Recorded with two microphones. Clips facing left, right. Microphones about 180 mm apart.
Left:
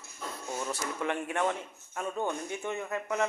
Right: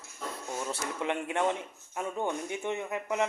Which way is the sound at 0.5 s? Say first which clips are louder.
Even; 20° right (ahead or behind).